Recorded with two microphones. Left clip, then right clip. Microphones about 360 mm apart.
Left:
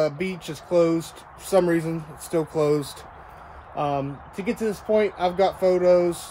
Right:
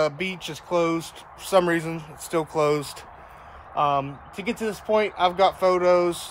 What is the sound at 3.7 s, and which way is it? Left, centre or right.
Speech, centre.